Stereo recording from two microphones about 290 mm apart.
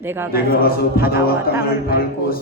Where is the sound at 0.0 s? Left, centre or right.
Centre.